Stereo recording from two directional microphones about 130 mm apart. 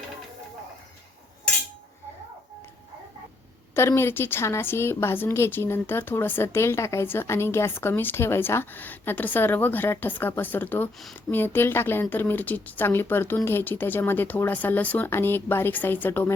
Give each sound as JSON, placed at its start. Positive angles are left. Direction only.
{"t": 3.8, "sound": "a woman's voice", "side_deg": 20}